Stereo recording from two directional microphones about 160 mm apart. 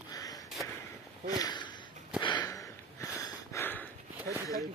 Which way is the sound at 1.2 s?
25° left (ahead or behind).